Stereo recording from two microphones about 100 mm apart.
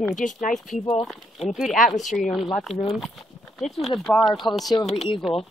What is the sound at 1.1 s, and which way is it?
Speech, centre (ahead or behind).